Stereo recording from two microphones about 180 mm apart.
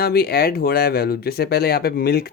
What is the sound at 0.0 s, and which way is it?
Speech, 60° left (ahead or behind).